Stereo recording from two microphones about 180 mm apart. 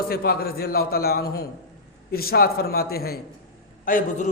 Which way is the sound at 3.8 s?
50° left (ahead or behind).